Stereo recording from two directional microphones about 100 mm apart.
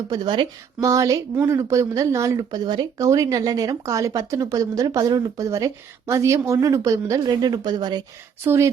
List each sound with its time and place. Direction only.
0.1 s speech: 50° right (ahead or behind)
0.8 s speech: 35° right (ahead or behind)
2.6 s speech: 45° right (ahead or behind)
8.4 s speech: 30° right (ahead or behind)